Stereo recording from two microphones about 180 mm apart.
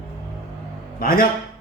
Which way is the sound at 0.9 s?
55° left (ahead or behind).